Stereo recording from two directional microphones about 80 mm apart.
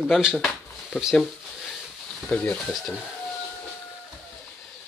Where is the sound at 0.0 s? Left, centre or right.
Centre.